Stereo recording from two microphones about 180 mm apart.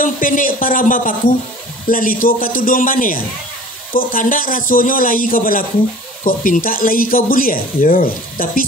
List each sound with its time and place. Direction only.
0.0 s speech: 50° left (ahead or behind)